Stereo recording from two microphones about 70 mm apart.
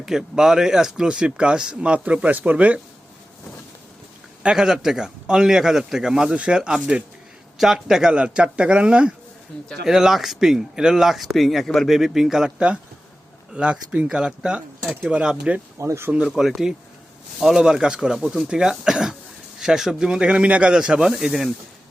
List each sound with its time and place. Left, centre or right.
0.0 s speech: centre; by 2.8 s right
4.4 s speech: centre
8.1 s speech: centre
15.8 s speech: right
16.1 s speech: centre